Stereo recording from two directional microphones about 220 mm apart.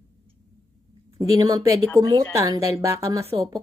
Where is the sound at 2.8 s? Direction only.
15° right (ahead or behind).